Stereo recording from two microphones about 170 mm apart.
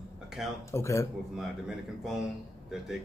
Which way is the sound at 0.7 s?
15° left (ahead or behind).